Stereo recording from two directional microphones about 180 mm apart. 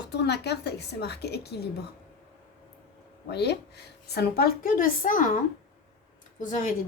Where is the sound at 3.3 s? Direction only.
65° left (ahead or behind); by 5.3 s 50° left (ahead or behind).